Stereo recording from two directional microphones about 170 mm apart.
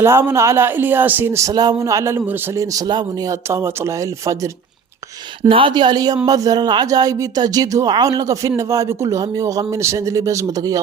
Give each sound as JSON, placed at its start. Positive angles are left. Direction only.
{"t": 0.0, "sound": "speech", "side_deg": -15}
{"t": 5.4, "sound": "speech", "side_deg": -30}